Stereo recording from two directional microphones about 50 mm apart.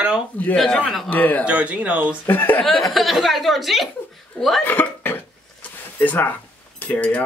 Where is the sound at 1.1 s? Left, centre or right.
Left.